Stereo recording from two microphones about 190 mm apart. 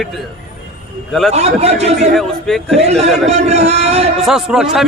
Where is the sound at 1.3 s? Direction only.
35° right (ahead or behind).